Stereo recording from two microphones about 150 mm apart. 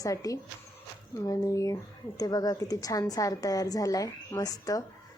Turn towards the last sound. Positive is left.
turn(degrees=25)  # may be behind; listen again after turning